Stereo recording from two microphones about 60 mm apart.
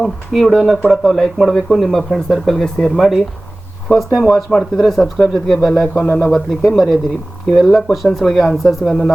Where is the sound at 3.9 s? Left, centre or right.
Centre.